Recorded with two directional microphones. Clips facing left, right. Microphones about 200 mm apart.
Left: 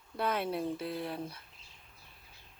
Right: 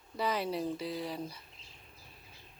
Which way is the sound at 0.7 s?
55° left (ahead or behind).